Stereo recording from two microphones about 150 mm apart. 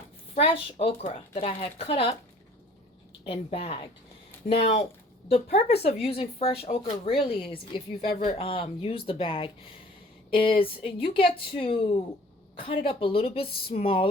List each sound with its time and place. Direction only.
0.3 s speech: 40° left (ahead or behind)
3.2 s speech: 40° left (ahead or behind)